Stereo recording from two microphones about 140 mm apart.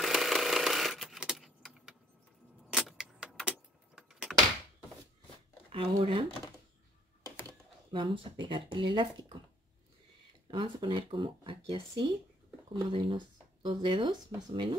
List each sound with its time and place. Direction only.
0.0 s a sound: centre (ahead or behind)
2.7 s vehicle: centre (ahead or behind)
5.7 s speech: 40° right (ahead or behind)
7.2 s a sound: 20° left (ahead or behind)
7.9 s speech: 35° right (ahead or behind)
10.5 s speech: 35° right (ahead or behind)